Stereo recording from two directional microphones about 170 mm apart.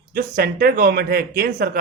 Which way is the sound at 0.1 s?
60° right (ahead or behind).